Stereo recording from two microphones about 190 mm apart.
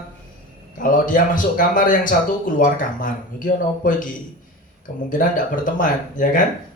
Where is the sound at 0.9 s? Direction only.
45° left (ahead or behind).